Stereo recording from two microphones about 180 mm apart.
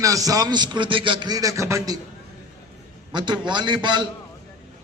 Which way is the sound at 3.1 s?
25° right (ahead or behind).